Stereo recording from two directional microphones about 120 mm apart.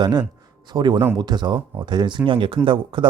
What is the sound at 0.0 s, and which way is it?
A man's voice, 35° right (ahead or behind).